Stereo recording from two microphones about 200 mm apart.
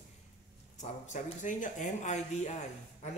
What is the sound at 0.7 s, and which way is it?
A man's voice, 35° left (ahead or behind).